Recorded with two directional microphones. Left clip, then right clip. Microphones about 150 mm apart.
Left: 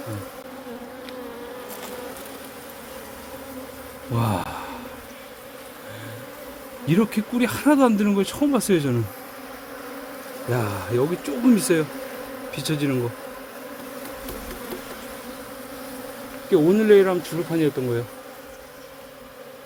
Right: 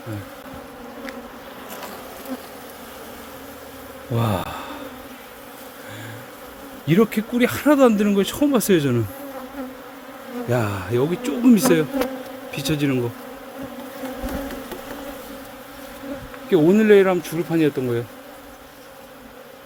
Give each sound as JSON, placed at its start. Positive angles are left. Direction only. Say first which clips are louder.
{"t": 4.1, "sound": "bee", "louder": "right 2 dB", "side_deg": -15}
{"t": 6.8, "sound": "speech", "louder": "right 4 dB", "side_deg": -15}
{"t": 10.5, "sound": "speech", "louder": "right 2 dB", "side_deg": -15}
{"t": 12.5, "sound": "bee", "louder": "right 3 dB", "side_deg": -15}
{"t": 16.5, "sound": "speech", "louder": "right 1 dB", "side_deg": -20}